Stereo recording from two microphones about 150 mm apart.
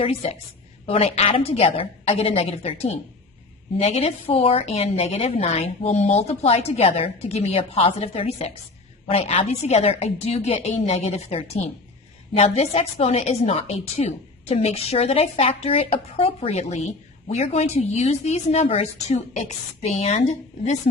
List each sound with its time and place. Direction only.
0.0 s a woman's voice: 40° left (ahead or behind)